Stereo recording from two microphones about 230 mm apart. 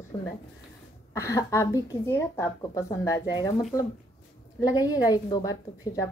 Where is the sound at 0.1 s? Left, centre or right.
Centre.